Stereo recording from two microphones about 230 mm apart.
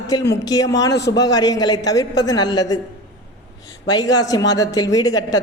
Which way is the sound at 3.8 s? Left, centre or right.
Centre.